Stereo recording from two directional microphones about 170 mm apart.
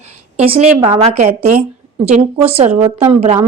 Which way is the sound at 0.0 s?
35° right (ahead or behind).